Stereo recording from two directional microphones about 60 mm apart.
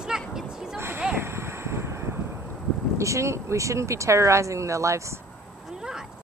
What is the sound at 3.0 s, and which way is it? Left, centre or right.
Speech, right.